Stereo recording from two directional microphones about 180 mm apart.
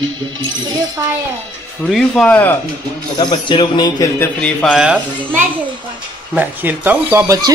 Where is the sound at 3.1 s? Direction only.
25° left (ahead or behind).